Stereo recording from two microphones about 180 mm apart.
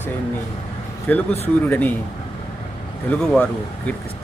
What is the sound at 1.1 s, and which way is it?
Speech, 10° left (ahead or behind).